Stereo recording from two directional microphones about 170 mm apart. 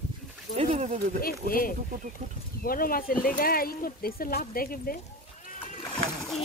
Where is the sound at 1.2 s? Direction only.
55° left (ahead or behind).